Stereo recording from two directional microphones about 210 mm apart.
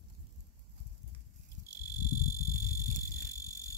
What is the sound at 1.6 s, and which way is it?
Frog, 15° left (ahead or behind).